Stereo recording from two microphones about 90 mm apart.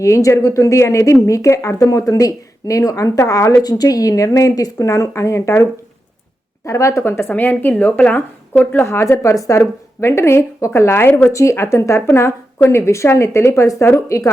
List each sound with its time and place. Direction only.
0.0 s speech: 35° left (ahead or behind)
6.7 s speech: 35° left (ahead or behind)